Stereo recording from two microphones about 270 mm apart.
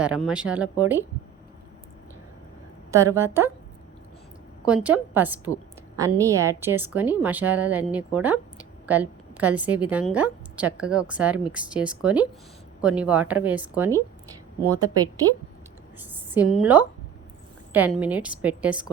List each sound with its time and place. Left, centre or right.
0.0 s a woman's voice: centre
2.9 s a woman's voice: centre
4.6 s a woman's voice: centre